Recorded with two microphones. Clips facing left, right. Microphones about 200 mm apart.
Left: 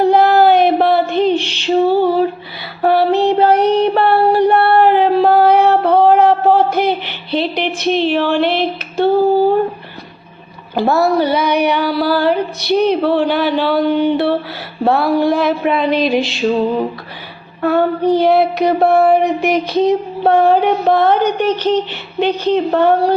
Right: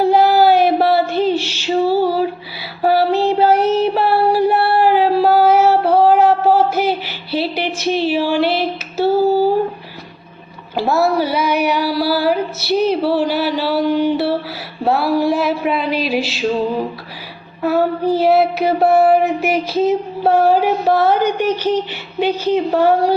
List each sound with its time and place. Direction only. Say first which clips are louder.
0.0 s a sound: left 2 dB; 5° right (ahead or behind)
2.8 s child singing: left 2 dB; 5° right (ahead or behind)
8.2 s female singing: left 1 dB; 10° right (ahead or behind)
10.8 s child singing: left 2 dB; centre (ahead or behind)
12.9 s speech: left 2 dB; 5° right (ahead or behind)
13.8 s a sound: left 2 dB; 60° left (ahead or behind)
14.8 s child singing: left 2 dB; 5° right (ahead or behind)
17.6 s child singing: left 2 dB; 5° right (ahead or behind)